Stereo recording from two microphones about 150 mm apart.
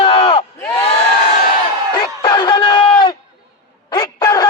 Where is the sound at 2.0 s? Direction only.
30° left (ahead or behind).